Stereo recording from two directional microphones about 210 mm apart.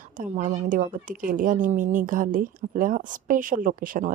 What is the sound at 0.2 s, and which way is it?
A woman's voice, 35° right (ahead or behind).